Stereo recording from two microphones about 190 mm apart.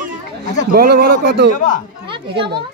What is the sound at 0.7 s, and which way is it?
Speech, 55° right (ahead or behind).